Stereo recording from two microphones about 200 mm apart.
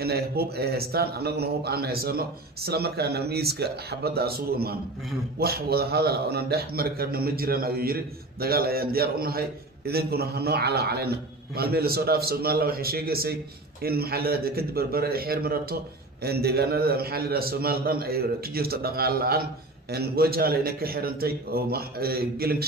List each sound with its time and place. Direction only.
0.0 s a man's voice: 50° right (ahead or behind)